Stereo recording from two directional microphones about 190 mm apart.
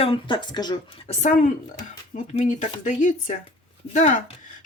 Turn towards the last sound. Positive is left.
turn(degrees=40)  # may be behind; listen again after turning